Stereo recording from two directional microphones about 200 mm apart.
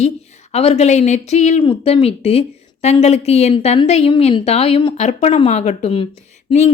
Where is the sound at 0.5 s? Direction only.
30° left (ahead or behind).